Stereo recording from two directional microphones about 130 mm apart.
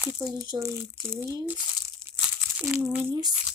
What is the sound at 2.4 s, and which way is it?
Speech, 10° right (ahead or behind).